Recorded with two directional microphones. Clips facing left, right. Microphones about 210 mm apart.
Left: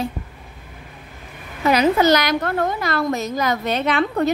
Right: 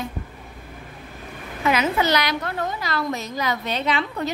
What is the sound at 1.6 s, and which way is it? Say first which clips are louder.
A woman's voice: left 6 dB; 40° left (ahead or behind).